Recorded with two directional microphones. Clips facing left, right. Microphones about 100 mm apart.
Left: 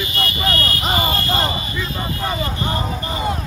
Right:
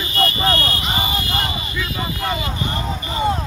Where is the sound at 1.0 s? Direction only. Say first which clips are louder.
Left 3 dB; 15° right (ahead or behind).